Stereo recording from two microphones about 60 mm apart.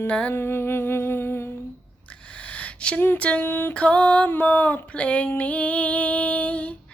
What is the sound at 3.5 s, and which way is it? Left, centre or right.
Music, left.